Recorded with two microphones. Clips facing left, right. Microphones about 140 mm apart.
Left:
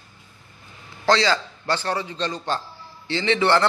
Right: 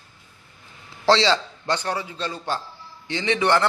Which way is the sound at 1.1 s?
25° right (ahead or behind).